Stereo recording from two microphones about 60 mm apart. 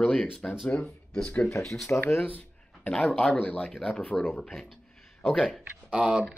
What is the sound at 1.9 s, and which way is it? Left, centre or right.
Speech, left.